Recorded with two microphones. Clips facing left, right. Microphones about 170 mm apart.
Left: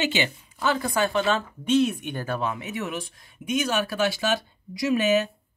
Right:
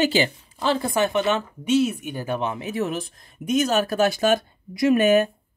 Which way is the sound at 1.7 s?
5° right (ahead or behind).